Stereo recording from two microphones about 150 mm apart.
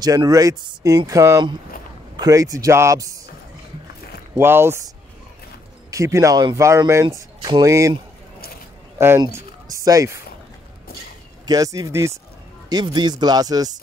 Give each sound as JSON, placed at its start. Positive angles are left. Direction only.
{"t": 0.0, "sound": "speech", "side_deg": -25}
{"t": 4.4, "sound": "speech", "side_deg": -15}
{"t": 8.9, "sound": "speech", "side_deg": -15}
{"t": 11.4, "sound": "speech", "side_deg": -25}